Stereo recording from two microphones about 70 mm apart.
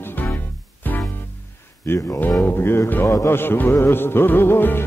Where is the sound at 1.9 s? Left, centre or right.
Left.